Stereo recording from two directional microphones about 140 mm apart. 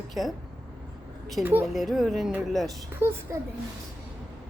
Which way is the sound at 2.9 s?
15° right (ahead or behind).